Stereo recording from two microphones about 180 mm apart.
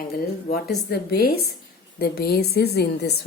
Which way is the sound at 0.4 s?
60° left (ahead or behind).